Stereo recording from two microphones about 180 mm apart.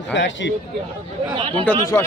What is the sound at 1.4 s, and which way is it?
Speech, 30° right (ahead or behind).